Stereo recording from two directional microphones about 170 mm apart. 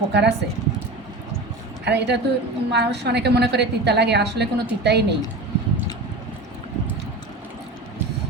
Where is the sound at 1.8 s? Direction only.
85° right.